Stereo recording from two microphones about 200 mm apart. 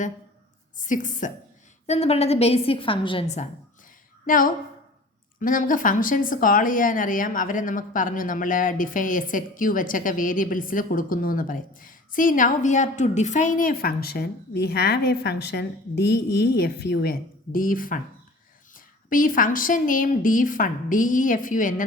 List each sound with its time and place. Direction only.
0.8 s a woman's voice: 40° left (ahead or behind)